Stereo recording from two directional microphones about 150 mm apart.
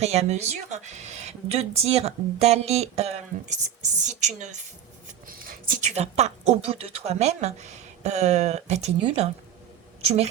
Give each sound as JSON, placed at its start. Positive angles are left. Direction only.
{"t": 0.0, "sound": "a woman's voice", "side_deg": -45}
{"t": 5.0, "sound": "speech", "side_deg": -65}